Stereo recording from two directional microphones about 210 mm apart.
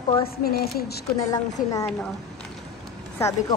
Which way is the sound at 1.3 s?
15° left (ahead or behind).